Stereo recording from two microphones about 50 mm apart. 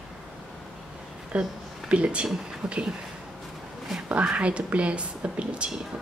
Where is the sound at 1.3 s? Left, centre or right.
Right.